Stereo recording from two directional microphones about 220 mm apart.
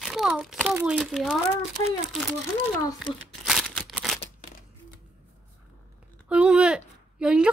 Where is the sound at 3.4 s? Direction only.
Centre (ahead or behind).